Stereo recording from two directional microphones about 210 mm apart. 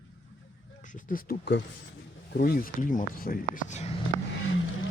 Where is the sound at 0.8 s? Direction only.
35° left (ahead or behind).